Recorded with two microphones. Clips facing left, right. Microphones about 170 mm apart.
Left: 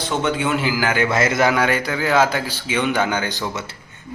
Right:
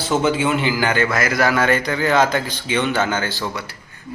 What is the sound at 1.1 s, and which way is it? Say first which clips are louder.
A man's voice: left 1 dB; 25° left (ahead or behind).